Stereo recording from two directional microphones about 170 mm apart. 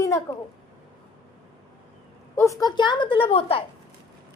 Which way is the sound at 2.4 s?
20° left (ahead or behind).